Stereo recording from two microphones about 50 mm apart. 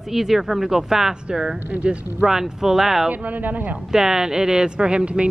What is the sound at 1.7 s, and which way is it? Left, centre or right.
Speech, right.